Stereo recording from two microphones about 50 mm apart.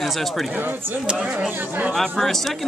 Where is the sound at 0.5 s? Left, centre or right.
Right.